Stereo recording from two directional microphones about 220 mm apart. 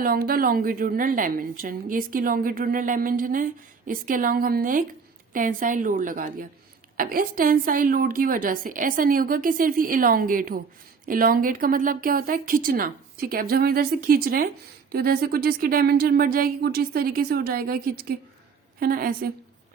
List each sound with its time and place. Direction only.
0.0 s a woman's voice: 40° right (ahead or behind)